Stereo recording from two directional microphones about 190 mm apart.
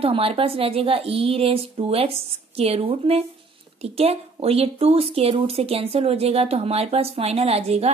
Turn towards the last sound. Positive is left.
turn(degrees=-35)  # may be behind; listen again after turning